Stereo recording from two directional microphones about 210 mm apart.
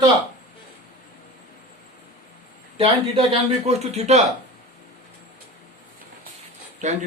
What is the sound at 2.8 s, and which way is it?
A man's voice, 25° right (ahead or behind).